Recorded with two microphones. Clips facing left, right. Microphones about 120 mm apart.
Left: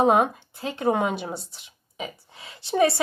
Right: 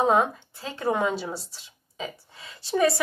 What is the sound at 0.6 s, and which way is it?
Speech, 20° left (ahead or behind).